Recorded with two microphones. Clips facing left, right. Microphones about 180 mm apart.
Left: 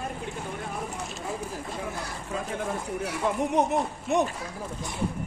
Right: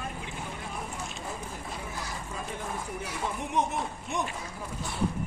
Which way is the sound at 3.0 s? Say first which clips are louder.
Left 10 dB; 65° left (ahead or behind).